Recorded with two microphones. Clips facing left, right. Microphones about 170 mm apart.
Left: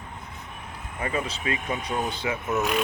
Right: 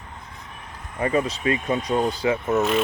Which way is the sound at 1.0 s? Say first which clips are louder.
Right 7 dB; 40° right (ahead or behind).